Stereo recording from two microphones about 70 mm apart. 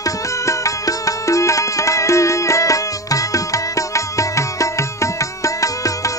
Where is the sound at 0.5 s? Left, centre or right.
Left.